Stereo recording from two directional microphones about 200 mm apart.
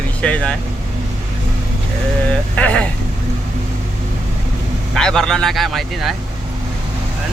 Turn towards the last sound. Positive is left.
turn(degrees=0)  # may be behind; listen again after turning